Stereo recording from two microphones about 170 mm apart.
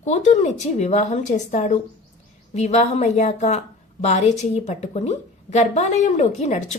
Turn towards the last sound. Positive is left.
turn(degrees=40)  # may be behind; listen again after turning